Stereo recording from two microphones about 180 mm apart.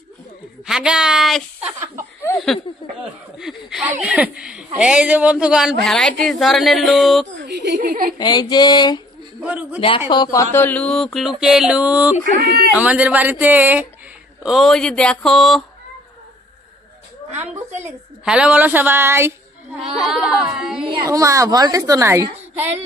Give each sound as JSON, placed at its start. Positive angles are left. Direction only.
{"t": 0.7, "sound": "speech", "side_deg": -5}
{"t": 7.3, "sound": "a woman's voice", "side_deg": -70}
{"t": 8.2, "sound": "a sound", "side_deg": 25}
{"t": 9.4, "sound": "speech", "side_deg": -5}
{"t": 9.8, "sound": "speech", "side_deg": 30}
{"t": 12.4, "sound": "speech", "side_deg": -60}
{"t": 12.7, "sound": "speech", "side_deg": -10}
{"t": 18.2, "sound": "speech", "side_deg": -5}
{"t": 19.8, "sound": "speech", "side_deg": 0}
{"t": 20.8, "sound": "a woman's voice", "side_deg": -20}